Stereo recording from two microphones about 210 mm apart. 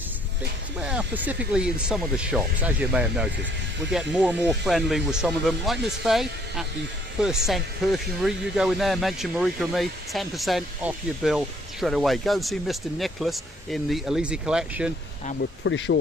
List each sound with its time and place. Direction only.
0.8 s speech: 5° right (ahead or behind)
15.6 s speech: 60° left (ahead or behind)